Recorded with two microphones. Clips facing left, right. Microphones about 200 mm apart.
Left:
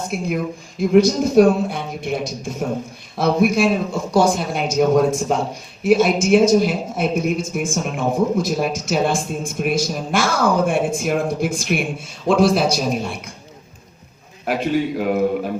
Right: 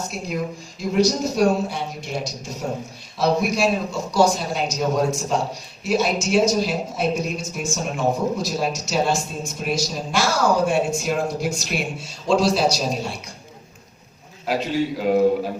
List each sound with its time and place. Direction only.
0.1 s a man's voice: 55° left (ahead or behind)
14.4 s a man's voice: 55° left (ahead or behind)